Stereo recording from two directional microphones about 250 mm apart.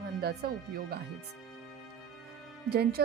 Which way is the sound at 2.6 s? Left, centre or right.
Right.